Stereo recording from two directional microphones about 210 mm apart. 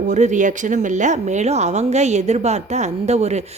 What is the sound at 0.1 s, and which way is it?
Speech, 35° right (ahead or behind).